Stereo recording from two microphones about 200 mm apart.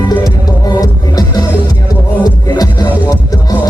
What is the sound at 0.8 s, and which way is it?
Music, 20° left (ahead or behind).